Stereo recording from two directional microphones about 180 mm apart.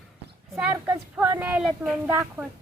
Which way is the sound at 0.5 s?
10° right (ahead or behind).